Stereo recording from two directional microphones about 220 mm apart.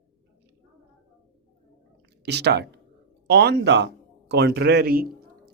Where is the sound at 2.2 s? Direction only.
50° right (ahead or behind).